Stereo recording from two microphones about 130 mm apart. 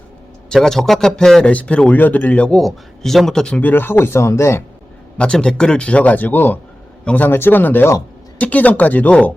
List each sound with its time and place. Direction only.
0.5 s speech: 5° left (ahead or behind); by 4.6 s 20° left (ahead or behind)
5.1 s speech: 10° left (ahead or behind)